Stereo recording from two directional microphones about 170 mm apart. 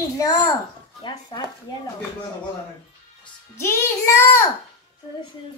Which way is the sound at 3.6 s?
15° left (ahead or behind).